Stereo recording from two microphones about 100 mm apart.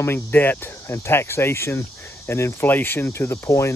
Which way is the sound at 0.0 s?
20° left (ahead or behind).